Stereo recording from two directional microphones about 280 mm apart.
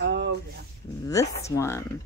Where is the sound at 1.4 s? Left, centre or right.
Centre.